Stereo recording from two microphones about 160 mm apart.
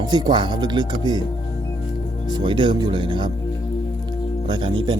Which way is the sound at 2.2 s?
30° right (ahead or behind).